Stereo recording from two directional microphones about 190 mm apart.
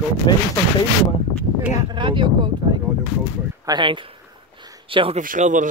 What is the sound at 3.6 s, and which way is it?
Speech, 25° right (ahead or behind).